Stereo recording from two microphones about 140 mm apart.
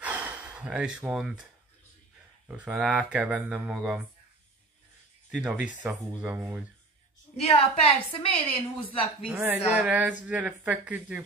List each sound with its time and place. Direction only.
0.0 s gasp: 10° right (ahead or behind)
2.4 s speech: 10° right (ahead or behind)
5.3 s speech: 10° right (ahead or behind)
7.3 s a woman's voice: 45° left (ahead or behind)
9.2 s speech: 10° right (ahead or behind)